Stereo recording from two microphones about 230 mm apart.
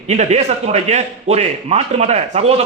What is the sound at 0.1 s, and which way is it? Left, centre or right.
A man's voice, right.